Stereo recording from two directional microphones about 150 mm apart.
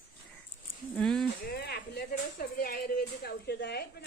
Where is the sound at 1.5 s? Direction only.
90° left.